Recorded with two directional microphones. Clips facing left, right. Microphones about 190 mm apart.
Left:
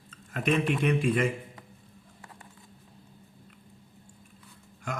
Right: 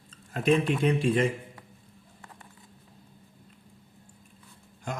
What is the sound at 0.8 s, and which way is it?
Speech, 30° right (ahead or behind).